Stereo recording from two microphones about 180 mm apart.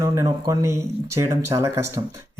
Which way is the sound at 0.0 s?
15° right (ahead or behind).